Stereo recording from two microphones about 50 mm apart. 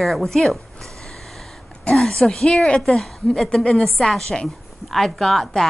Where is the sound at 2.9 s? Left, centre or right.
Centre.